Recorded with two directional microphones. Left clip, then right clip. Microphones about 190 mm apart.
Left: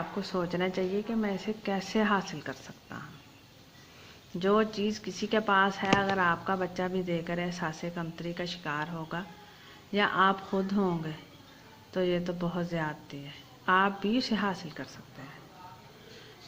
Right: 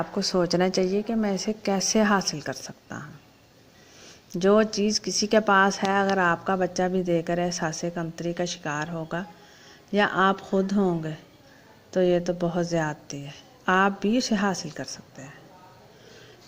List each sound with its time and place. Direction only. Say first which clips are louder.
0.2 s a woman's voice: right 9 dB; 35° right (ahead or behind)
4.4 s a woman's voice: right 6 dB; 35° right (ahead or behind)